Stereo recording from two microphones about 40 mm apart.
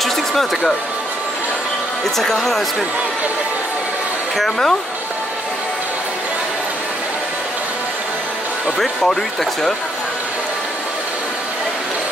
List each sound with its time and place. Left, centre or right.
0.0 s a sound: centre
2.1 s speech: centre
4.4 s speech: centre
8.7 s speech: centre